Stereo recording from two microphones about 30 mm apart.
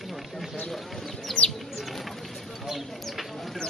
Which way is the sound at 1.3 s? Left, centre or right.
Centre.